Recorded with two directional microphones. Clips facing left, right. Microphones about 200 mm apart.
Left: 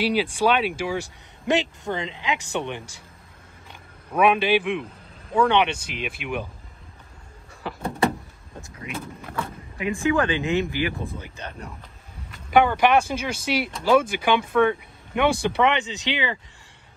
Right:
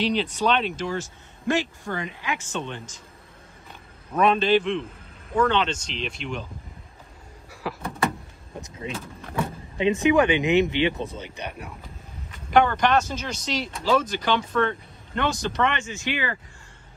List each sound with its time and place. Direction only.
0.0 s speech: 10° left (ahead or behind)
4.1 s speech: 10° left (ahead or behind)
5.7 s speech: 60° left (ahead or behind)
5.9 s speech: 10° left (ahead or behind)
7.7 s vehicle: centre (ahead or behind)
8.5 s speech: 20° right (ahead or behind)
12.4 s speech: 5° left (ahead or behind)